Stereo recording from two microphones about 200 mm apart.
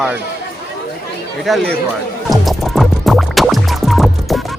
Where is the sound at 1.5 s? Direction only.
Centre (ahead or behind).